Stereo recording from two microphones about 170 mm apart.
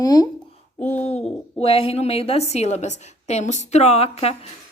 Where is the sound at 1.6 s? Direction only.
35° left (ahead or behind).